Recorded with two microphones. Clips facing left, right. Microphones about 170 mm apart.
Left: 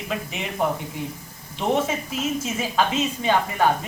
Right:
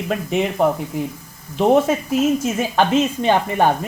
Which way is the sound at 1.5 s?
50° right (ahead or behind).